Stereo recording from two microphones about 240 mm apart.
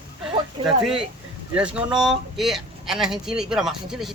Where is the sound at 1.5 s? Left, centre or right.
Centre.